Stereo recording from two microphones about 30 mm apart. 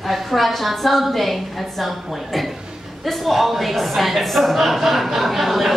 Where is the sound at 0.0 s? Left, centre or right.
Centre.